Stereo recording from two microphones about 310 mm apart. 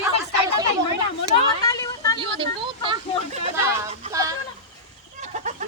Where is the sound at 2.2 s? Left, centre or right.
Centre.